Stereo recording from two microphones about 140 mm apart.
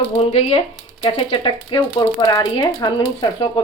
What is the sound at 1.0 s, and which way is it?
Speech, 30° left (ahead or behind).